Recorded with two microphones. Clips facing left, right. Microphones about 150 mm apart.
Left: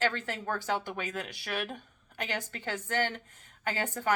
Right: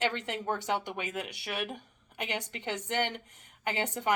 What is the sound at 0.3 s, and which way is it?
Speech, 20° right (ahead or behind).